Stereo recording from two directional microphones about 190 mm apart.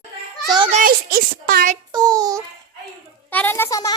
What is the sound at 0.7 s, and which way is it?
A child's voice, 50° right (ahead or behind).